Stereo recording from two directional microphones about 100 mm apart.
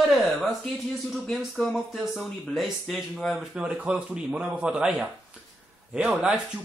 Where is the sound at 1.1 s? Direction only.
Centre (ahead or behind).